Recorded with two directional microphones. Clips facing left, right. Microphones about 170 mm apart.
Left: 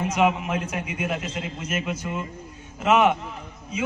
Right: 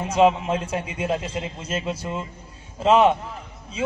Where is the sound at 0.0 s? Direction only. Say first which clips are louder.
Right 4 dB; 30° right (ahead or behind).